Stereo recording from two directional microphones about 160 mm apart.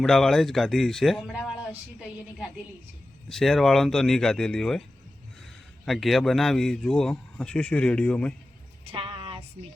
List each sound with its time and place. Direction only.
0.0 s a man's voice: 5° left (ahead or behind)
3.2 s a man's voice: centre (ahead or behind)
5.8 s a man's voice: centre (ahead or behind)
8.8 s a sound: 35° right (ahead or behind)